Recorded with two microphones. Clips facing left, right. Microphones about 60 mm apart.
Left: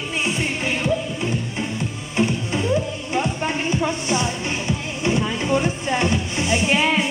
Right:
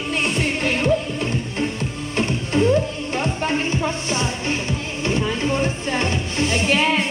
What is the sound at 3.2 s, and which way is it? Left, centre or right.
Music, centre.